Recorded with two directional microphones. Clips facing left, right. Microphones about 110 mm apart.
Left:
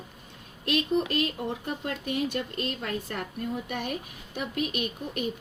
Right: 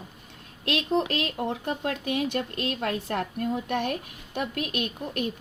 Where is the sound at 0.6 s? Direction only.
85° right.